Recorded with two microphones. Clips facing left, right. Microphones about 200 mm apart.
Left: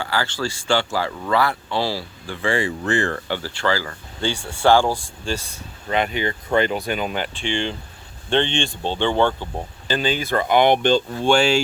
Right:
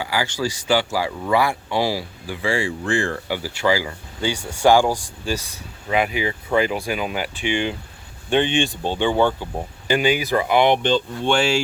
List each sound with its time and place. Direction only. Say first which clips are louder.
0.0 s speech: right 1 dB; 10° right (ahead or behind)
10.8 s speech: left 2 dB; 45° left (ahead or behind)
11.3 s speech: left 1 dB; 5° right (ahead or behind)